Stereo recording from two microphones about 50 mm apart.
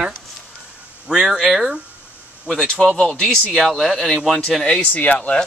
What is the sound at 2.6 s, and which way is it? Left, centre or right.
Speech, centre.